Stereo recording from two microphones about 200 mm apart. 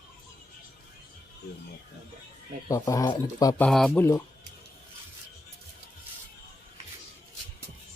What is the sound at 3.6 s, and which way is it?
Speech, 5° left (ahead or behind).